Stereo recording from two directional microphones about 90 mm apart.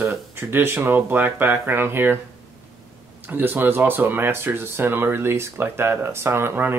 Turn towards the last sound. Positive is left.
turn(degrees=-25)  # may be behind; listen again after turning